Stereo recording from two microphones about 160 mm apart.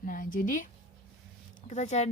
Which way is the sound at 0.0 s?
60° left (ahead or behind).